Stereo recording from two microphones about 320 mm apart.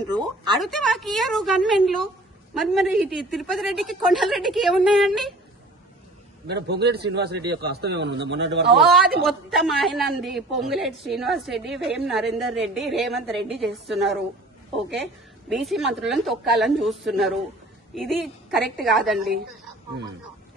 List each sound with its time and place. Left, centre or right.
0.6 s a woman's voice: centre
6.4 s a man's voice: right
8.7 s a woman's voice: centre
15.5 s a woman's voice: centre